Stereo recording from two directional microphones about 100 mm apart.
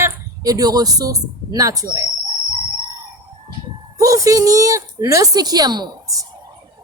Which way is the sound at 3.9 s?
35° right (ahead or behind).